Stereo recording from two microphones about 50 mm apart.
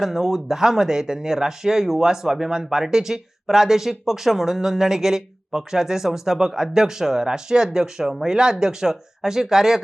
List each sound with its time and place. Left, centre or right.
0.0 s speech: centre